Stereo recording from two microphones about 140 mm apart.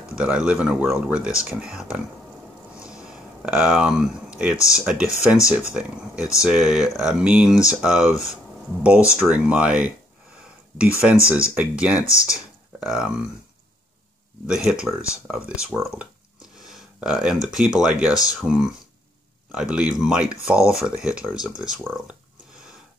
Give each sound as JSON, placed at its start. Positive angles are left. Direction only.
{"t": 0.1, "sound": "speech", "side_deg": -5}
{"t": 2.8, "sound": "a sound", "side_deg": -5}
{"t": 4.7, "sound": "speech", "side_deg": -5}
{"t": 12.2, "sound": "speech", "side_deg": 25}
{"t": 12.8, "sound": "speech", "side_deg": -5}
{"t": 14.5, "sound": "speech", "side_deg": -5}